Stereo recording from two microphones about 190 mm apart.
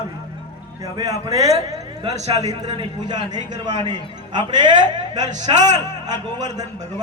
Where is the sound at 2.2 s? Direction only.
35° right (ahead or behind).